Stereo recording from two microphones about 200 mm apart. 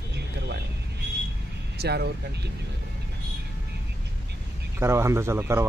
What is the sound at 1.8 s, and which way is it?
Speech, 55° right (ahead or behind).